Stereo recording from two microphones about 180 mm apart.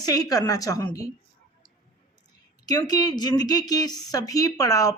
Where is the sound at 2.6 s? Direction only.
20° left (ahead or behind).